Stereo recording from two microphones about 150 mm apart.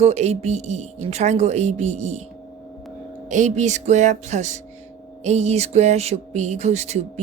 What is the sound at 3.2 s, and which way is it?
Music, 55° right (ahead or behind).